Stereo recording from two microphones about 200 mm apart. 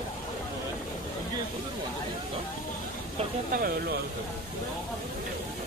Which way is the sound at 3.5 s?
50° right (ahead or behind).